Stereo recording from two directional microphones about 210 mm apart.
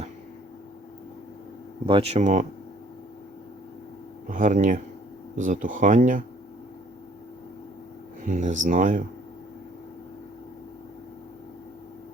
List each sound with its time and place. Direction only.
1.9 s speech: 25° right (ahead or behind)
4.3 s speech: 35° right (ahead or behind)
8.2 s speech: 35° right (ahead or behind)